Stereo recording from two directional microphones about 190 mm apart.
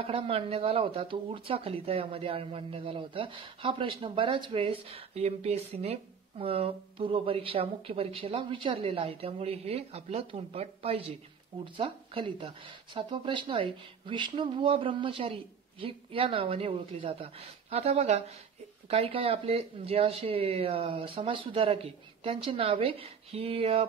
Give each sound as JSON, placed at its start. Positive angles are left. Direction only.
{"t": 0.0, "sound": "speech", "side_deg": -30}